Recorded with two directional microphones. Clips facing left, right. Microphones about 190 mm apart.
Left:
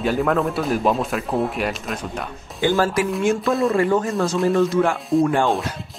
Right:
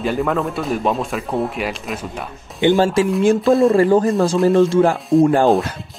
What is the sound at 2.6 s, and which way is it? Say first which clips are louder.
Speech: right 5 dB; 25° right (ahead or behind).